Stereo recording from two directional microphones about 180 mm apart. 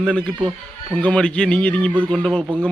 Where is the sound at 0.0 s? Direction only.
5° left (ahead or behind).